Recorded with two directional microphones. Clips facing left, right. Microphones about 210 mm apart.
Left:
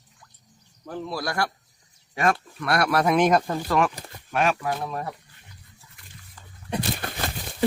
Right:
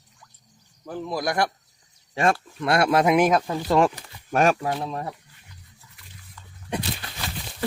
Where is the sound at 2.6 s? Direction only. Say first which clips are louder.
Right 3 dB; 25° right (ahead or behind).